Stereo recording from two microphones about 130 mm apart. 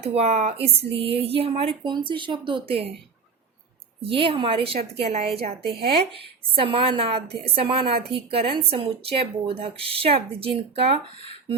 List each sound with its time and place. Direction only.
0.0 s a woman's voice: 55° right (ahead or behind)
1.8 s speech: 35° right (ahead or behind)
4.0 s a woman's voice: 45° right (ahead or behind)